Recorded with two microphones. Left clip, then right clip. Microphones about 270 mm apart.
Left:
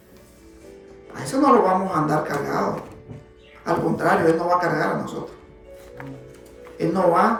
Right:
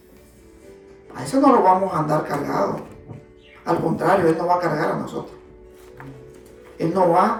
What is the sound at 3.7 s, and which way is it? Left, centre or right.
A man's voice, centre.